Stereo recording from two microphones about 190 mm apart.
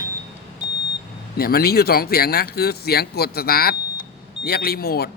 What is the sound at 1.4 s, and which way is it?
Speech, 55° left (ahead or behind).